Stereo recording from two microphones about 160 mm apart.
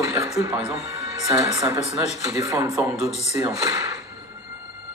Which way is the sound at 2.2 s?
20° right (ahead or behind).